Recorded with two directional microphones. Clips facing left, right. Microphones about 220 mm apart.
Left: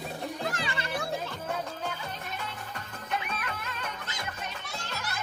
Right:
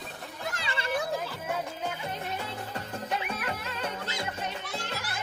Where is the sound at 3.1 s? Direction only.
30° right (ahead or behind).